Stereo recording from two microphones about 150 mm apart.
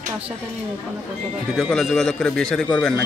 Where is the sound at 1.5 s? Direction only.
5° left (ahead or behind).